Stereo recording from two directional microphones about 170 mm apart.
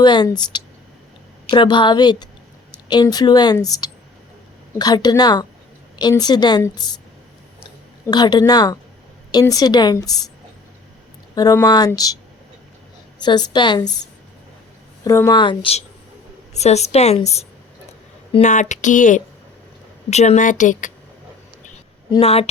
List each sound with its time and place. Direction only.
0.0 s speech: 25° left (ahead or behind)
8.0 s speech: 25° left (ahead or behind)
11.3 s speech: 20° left (ahead or behind)
13.1 s speech: 25° left (ahead or behind)
15.0 s a woman's voice: 20° left (ahead or behind); by 17.4 s 40° left (ahead or behind)
18.4 s speech: 45° left (ahead or behind)
22.2 s a woman's voice: 35° left (ahead or behind)